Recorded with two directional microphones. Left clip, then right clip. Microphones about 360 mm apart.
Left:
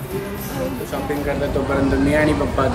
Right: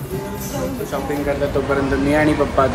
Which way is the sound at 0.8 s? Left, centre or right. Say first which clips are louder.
Right 3 dB; centre.